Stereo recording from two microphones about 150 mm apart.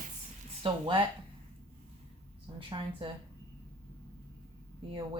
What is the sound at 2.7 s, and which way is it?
Speech, 35° right (ahead or behind).